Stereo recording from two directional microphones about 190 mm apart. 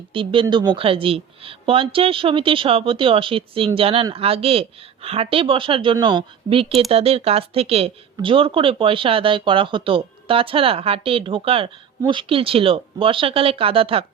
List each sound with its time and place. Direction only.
0.1 s speech: 25° right (ahead or behind)